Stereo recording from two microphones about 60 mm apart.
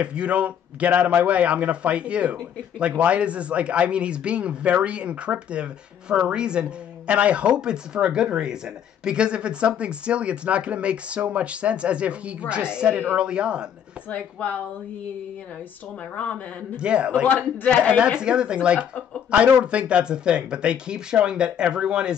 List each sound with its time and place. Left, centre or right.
0.0 s speech: centre
14.0 s a man's voice: left
16.8 s speech: centre
17.3 s a man's voice: left
18.2 s speech: centre